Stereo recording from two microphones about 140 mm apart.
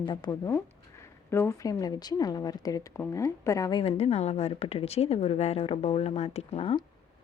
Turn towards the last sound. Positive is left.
turn(degrees=45)  # may be behind; listen again after turning